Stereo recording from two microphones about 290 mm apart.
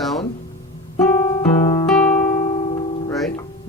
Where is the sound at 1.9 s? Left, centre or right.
Centre.